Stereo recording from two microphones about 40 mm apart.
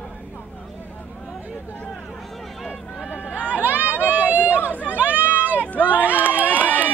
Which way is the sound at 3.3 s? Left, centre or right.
Right.